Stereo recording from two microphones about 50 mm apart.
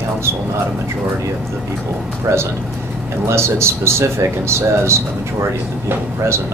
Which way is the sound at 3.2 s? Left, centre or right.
Right.